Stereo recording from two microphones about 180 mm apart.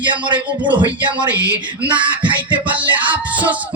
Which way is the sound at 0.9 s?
10° right (ahead or behind).